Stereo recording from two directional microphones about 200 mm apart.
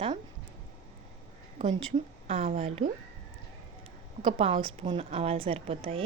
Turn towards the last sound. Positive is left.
turn(degrees=-25)  # may be behind; listen again after turning